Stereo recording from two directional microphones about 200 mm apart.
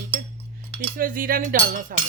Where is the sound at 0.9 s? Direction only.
45° right (ahead or behind).